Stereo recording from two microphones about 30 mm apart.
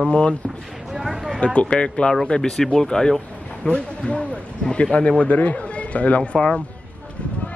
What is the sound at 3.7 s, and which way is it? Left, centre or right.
A man's voice, left.